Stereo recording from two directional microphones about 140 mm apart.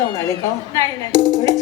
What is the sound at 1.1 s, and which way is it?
Speech, 25° right (ahead or behind).